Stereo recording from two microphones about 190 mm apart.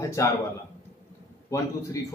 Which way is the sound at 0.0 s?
15° left (ahead or behind).